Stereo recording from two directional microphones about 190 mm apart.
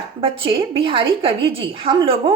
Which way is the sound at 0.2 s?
30° right (ahead or behind).